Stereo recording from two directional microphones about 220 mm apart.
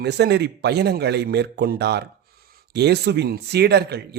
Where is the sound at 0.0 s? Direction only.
50° right (ahead or behind).